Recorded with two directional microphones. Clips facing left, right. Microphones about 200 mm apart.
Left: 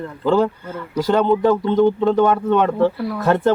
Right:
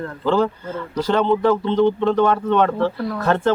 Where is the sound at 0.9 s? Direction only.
10° left (ahead or behind).